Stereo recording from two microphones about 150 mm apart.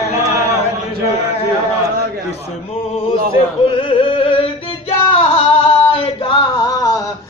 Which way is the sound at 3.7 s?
35° left (ahead or behind).